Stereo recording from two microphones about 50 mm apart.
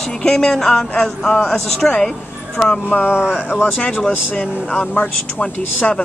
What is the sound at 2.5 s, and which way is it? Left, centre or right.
Speech, centre.